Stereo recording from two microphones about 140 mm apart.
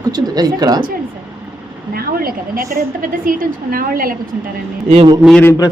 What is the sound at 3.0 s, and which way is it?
A woman's voice, 85° right.